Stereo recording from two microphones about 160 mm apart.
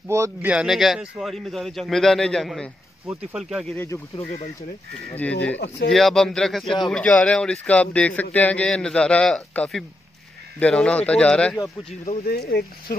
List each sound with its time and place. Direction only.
0.1 s speech: 15° right (ahead or behind)
3.7 s speech: 15° left (ahead or behind)
11.9 s speech: 40° left (ahead or behind)
12.3 s speech: 75° left (ahead or behind)